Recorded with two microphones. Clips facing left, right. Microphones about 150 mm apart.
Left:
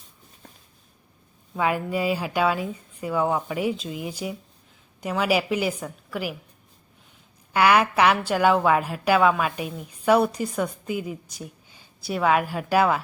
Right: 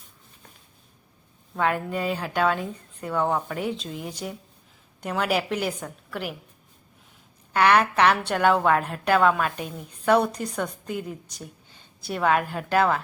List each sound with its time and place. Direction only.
1.5 s a woman's voice: 10° left (ahead or behind)
7.5 s a woman's voice: 5° left (ahead or behind)